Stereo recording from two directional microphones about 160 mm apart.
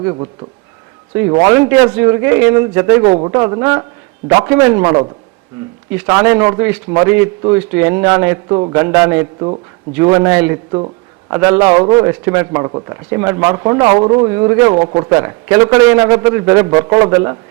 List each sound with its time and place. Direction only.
0.0 s a man's voice: 25° right (ahead or behind)
1.3 s a man's voice: 20° right (ahead or behind)
10.7 s a sound: 25° right (ahead or behind)
11.3 s a man's voice: 15° right (ahead or behind)
14.3 s a man's voice: 15° right (ahead or behind)